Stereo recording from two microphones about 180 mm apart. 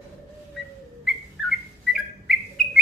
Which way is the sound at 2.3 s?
Centre (ahead or behind).